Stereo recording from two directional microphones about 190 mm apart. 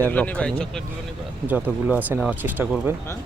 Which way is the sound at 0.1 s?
5° left (ahead or behind).